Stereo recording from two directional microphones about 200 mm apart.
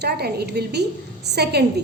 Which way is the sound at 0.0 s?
55° right (ahead or behind).